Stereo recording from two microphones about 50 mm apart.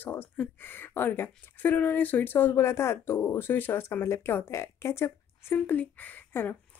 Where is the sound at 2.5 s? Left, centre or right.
Left.